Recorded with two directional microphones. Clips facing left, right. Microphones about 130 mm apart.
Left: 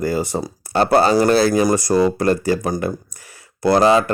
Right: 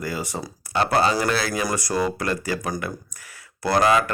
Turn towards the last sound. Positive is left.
turn(degrees=30)  # may be behind; listen again after turning